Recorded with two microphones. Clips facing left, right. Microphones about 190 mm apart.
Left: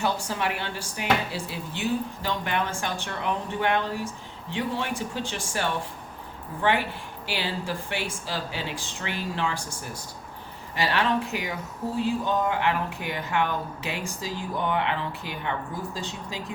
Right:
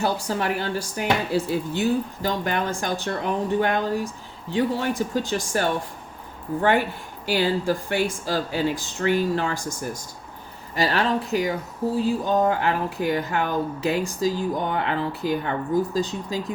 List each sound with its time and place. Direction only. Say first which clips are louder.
0.0 s speech: right 3 dB; 40° right (ahead or behind)